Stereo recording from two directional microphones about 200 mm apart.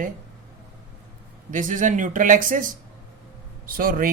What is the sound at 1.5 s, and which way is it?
Speech, 40° right (ahead or behind).